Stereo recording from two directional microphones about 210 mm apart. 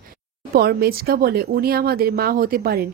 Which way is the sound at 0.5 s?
45° right (ahead or behind).